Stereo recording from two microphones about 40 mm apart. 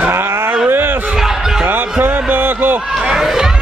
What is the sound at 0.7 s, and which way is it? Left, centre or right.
Speech, right.